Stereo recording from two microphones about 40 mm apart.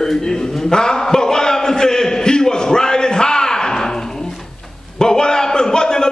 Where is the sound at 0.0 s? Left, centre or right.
Centre.